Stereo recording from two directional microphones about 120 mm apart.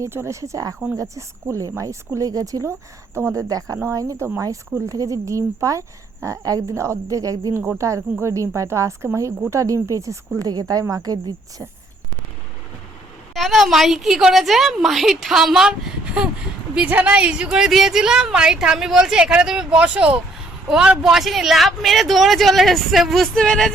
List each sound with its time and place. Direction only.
0.0 s speech: 20° right (ahead or behind)
13.3 s speech: centre (ahead or behind)
16.7 s speech: 10° right (ahead or behind); by 23.7 s 5° left (ahead or behind)